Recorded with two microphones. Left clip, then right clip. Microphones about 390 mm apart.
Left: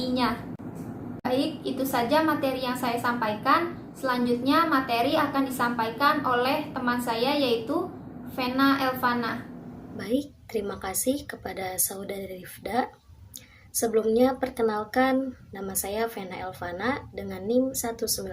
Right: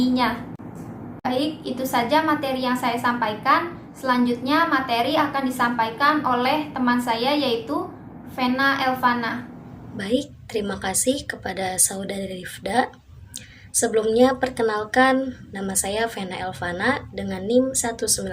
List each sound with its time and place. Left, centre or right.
0.0 s a woman's voice: centre
10.0 s a woman's voice: left